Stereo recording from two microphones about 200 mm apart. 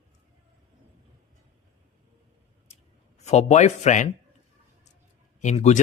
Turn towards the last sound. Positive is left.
turn(degrees=35)  # may be behind; listen again after turning